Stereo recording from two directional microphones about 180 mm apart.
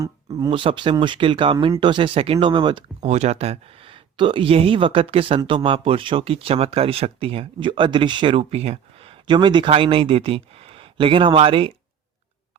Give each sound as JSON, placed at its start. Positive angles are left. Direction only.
{"t": 0.3, "sound": "speech", "side_deg": -25}
{"t": 3.0, "sound": "speech", "side_deg": -40}